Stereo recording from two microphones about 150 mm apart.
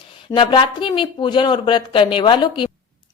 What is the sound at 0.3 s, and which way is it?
A woman's voice, 35° left (ahead or behind).